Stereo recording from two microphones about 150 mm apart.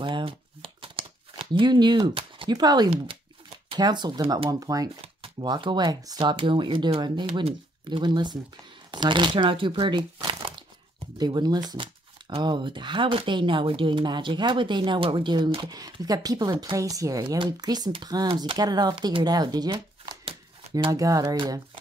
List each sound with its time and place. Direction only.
0.0 s shuffling cards: 35° right (ahead or behind)
3.6 s speech: 30° right (ahead or behind)